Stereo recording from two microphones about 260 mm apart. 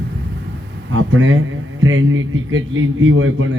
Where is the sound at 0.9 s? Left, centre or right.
Right.